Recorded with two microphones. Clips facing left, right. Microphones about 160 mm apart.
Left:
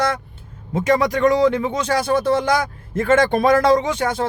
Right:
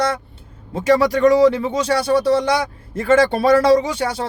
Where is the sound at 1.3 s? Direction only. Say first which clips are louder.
Right 4 dB; 35° right (ahead or behind).